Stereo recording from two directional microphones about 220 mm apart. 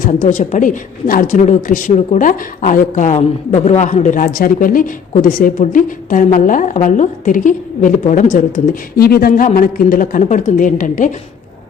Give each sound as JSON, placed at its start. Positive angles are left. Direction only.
{"t": 0.0, "sound": "speech", "side_deg": 35}